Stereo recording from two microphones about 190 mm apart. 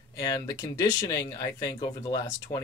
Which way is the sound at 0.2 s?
20° left (ahead or behind).